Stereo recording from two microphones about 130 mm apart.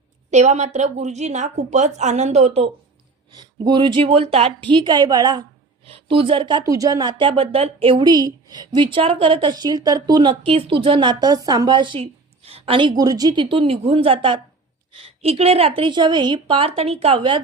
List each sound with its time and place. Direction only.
0.3 s a woman's voice: 65° right (ahead or behind)
3.3 s speech: 35° right (ahead or behind)
5.8 s speech: 45° right (ahead or behind)
13.0 s a woman's voice: 30° right (ahead or behind)